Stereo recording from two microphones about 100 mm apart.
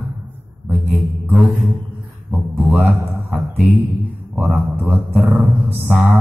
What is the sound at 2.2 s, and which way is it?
Speech, centre (ahead or behind).